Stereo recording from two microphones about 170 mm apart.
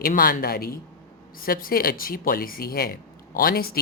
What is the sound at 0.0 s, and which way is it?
Speech, 60° left (ahead or behind).